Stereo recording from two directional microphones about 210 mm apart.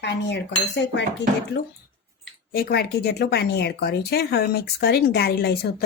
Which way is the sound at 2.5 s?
45° left (ahead or behind).